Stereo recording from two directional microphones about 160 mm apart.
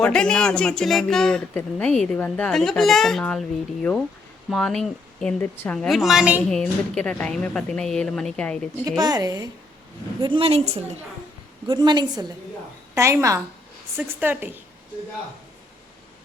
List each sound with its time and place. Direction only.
0.0 s speech: 5° left (ahead or behind)
4.4 s speech: 5° left (ahead or behind)
6.5 s speech: 5° left (ahead or behind)
8.8 s a woman's voice: 25° right (ahead or behind); by 10.9 s 40° right (ahead or behind)
11.7 s a woman's voice: 30° right (ahead or behind)
12.9 s a woman's voice: 15° right (ahead or behind)